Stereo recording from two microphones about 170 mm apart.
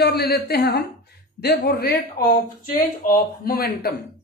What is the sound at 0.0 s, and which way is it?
A woman's voice, 65° left (ahead or behind).